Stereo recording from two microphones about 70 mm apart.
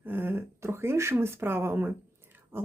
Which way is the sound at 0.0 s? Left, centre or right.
Right.